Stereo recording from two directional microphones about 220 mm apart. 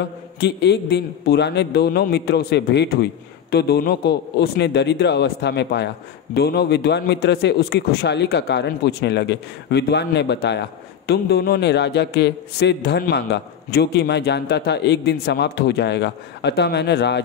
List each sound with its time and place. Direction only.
0.4 s a man's voice: 50° left (ahead or behind)